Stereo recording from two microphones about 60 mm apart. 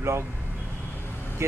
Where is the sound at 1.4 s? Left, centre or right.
Right.